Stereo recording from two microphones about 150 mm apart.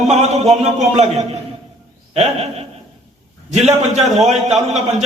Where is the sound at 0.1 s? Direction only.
45° right (ahead or behind).